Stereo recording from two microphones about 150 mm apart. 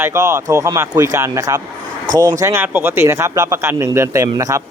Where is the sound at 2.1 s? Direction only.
60° right (ahead or behind).